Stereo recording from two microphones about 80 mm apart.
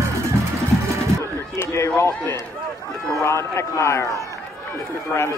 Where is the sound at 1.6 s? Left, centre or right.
Left.